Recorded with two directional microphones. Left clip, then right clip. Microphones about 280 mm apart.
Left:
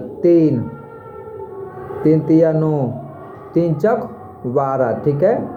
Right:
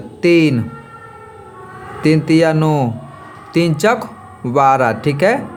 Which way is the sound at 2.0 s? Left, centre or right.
Right.